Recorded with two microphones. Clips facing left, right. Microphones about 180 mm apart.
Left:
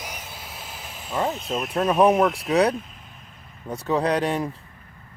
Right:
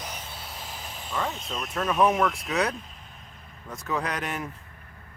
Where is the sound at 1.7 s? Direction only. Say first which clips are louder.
Left 5 dB; 35° left (ahead or behind).